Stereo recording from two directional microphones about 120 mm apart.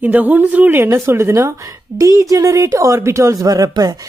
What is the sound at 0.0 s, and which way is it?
Speech, 15° right (ahead or behind).